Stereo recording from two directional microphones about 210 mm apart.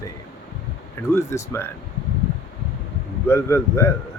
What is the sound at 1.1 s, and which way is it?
Speech, 15° left (ahead or behind).